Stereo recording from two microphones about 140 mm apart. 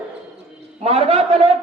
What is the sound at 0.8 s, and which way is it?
Speech, 45° right (ahead or behind).